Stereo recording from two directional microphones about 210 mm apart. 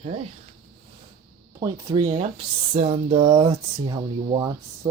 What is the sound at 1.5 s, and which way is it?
Speech, 15° right (ahead or behind).